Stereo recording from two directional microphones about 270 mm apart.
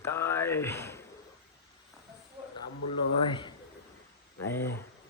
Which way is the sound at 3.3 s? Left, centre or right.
Centre.